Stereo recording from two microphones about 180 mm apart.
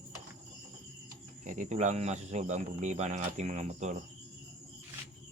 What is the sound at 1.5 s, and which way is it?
Speech, 40° right (ahead or behind).